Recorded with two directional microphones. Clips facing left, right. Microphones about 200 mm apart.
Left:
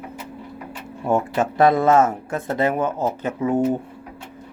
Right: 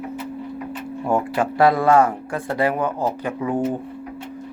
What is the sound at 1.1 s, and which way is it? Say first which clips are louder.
Speech: left 1 dB; 20° left (ahead or behind).